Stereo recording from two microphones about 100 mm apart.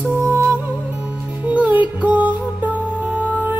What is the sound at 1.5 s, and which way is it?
Music, 15° right (ahead or behind).